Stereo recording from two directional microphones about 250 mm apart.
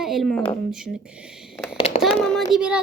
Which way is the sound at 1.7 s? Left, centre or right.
Left.